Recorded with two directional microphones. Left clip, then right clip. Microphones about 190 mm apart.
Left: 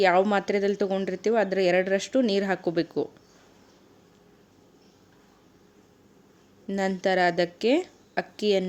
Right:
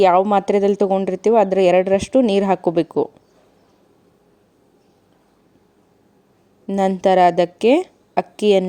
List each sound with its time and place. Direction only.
0.0 s speech: 35° right (ahead or behind)
6.7 s speech: 35° right (ahead or behind)